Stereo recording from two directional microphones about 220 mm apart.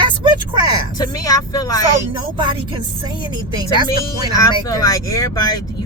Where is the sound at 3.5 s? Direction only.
20° right (ahead or behind).